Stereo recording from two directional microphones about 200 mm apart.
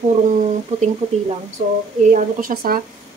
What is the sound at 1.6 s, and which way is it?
A woman's voice, 40° right (ahead or behind).